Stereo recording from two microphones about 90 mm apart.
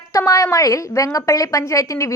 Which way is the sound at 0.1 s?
40° left (ahead or behind).